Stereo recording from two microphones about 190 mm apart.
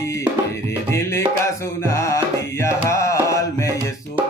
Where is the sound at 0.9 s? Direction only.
15° left (ahead or behind).